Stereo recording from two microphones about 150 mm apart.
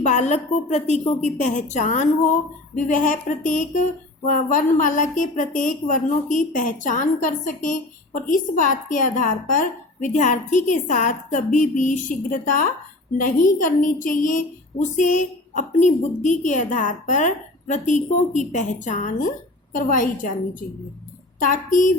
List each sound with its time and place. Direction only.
0.0 s a woman's voice: 50° left (ahead or behind)
21.3 s a woman's voice: 60° left (ahead or behind)